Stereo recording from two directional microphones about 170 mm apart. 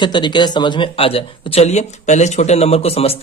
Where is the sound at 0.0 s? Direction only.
25° left (ahead or behind).